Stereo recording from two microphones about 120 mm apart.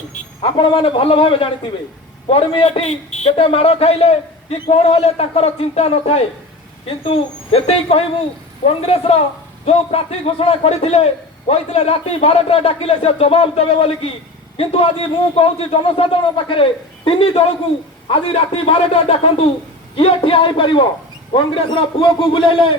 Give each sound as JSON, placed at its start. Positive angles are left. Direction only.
{"t": 0.4, "sound": "a man's voice", "side_deg": 45}